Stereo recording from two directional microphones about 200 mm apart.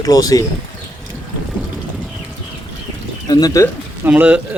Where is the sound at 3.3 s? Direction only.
20° left (ahead or behind).